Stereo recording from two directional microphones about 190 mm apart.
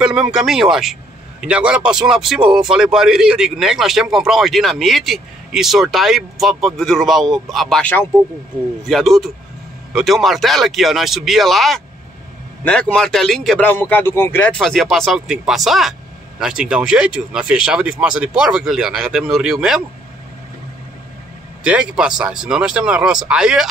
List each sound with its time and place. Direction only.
0.0 s a man's voice: 5° right (ahead or behind)
21.6 s a man's voice: 5° right (ahead or behind)